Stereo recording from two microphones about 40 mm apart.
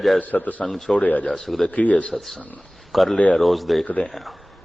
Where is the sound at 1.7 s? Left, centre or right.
Left.